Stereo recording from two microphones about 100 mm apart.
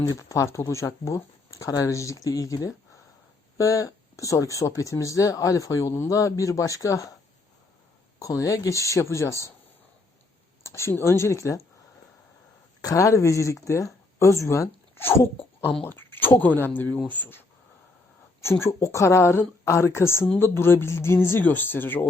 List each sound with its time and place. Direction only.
0.1 s speech: 30° left (ahead or behind)
8.2 s speech: 35° left (ahead or behind)
10.6 s a woman's voice: 30° left (ahead or behind)
12.8 s a woman's voice: 35° left (ahead or behind); by 17.4 s 20° left (ahead or behind)
18.4 s a woman's voice: 25° left (ahead or behind)